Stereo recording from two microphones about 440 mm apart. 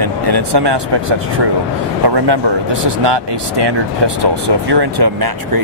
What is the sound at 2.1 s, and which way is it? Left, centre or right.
Speech, right.